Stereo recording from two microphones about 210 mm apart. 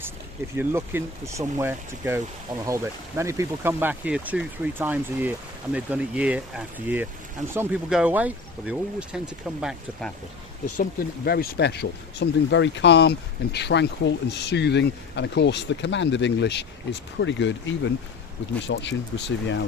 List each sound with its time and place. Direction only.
0.5 s speech: 10° right (ahead or behind)
11.3 s speech: 45° left (ahead or behind)